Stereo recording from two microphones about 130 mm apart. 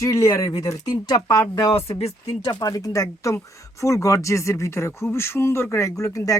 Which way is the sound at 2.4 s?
30° left (ahead or behind).